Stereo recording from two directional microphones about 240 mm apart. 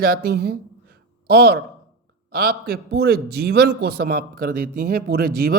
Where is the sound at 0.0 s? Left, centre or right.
Right.